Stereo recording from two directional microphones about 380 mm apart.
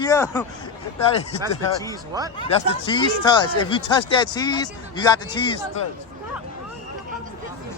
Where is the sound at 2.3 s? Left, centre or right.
Centre.